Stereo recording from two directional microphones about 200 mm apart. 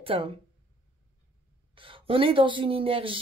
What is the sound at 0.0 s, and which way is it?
Speech, 25° right (ahead or behind).